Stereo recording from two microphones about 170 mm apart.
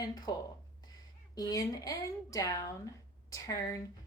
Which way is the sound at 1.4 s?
20° left (ahead or behind).